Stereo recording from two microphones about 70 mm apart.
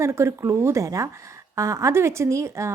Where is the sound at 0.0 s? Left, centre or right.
Right.